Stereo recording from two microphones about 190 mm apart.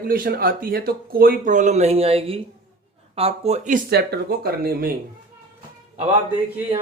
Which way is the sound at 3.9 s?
60° right (ahead or behind).